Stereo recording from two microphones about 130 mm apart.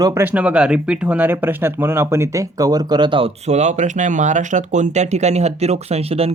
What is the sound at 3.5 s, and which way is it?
Speech, 65° right (ahead or behind).